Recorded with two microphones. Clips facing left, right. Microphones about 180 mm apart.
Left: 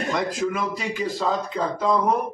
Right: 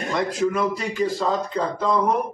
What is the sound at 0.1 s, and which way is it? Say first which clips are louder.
A man's voice: right 4 dB; centre (ahead or behind).